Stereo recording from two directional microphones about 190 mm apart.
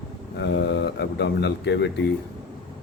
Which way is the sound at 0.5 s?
65° left (ahead or behind).